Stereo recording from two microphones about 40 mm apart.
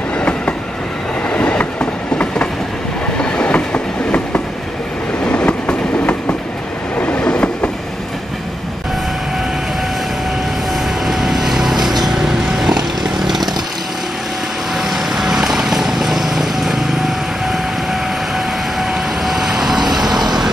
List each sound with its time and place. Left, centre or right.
0.2 s train: left
3.2 s train: left
3.5 s train: left
7.2 s train: left
11.1 s vehicle: centre
14.8 s vehicle: centre
18.8 s vehicle: centre